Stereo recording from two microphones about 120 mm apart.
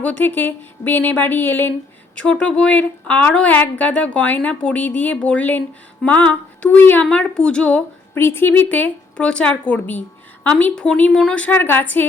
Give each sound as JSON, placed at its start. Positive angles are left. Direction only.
{"t": 0.0, "sound": "a woman's voice", "side_deg": 15}
{"t": 8.1, "sound": "a woman's voice", "side_deg": 20}